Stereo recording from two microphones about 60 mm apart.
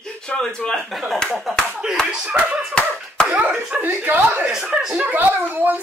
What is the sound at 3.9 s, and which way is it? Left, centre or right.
Speech, right.